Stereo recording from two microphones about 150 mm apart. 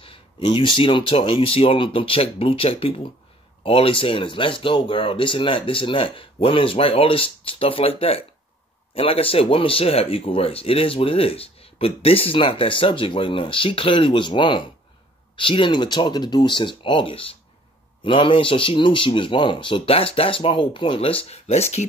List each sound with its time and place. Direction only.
0.0 s speech: 35° left (ahead or behind)